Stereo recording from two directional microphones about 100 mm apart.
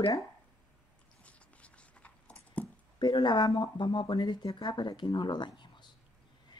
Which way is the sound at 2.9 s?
45° left (ahead or behind).